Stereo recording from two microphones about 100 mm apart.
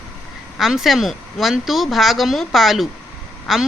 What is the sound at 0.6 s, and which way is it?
A woman's voice, 5° right (ahead or behind).